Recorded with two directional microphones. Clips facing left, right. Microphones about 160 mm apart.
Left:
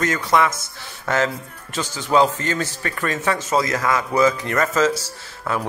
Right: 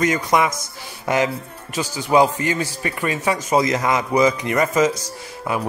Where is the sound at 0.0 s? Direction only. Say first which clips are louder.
Right 1 dB; 15° right (ahead or behind).